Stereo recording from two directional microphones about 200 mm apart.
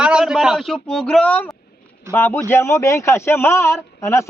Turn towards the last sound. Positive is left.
turn(degrees=15)  # may be behind; listen again after turning